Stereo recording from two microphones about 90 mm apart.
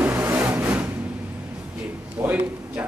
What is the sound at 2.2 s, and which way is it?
Speech, 20° right (ahead or behind).